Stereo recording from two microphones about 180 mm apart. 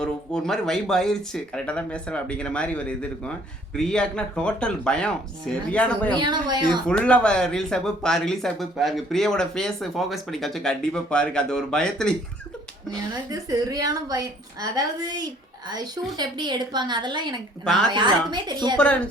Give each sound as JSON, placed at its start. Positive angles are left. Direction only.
{"t": 0.0, "sound": "speech", "side_deg": 5}
{"t": 6.1, "sound": "a woman's voice", "side_deg": -25}
{"t": 6.8, "sound": "speech", "side_deg": 5}
{"t": 13.3, "sound": "a woman's voice", "side_deg": -20}